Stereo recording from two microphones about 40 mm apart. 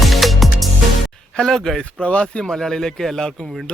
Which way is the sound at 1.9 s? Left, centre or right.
Left.